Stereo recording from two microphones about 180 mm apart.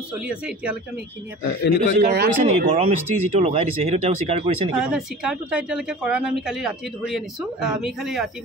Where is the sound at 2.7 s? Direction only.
35° right (ahead or behind).